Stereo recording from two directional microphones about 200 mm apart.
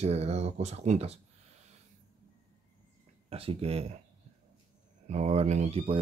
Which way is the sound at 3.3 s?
30° right (ahead or behind).